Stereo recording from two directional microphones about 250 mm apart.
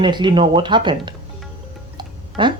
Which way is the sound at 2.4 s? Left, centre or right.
Centre.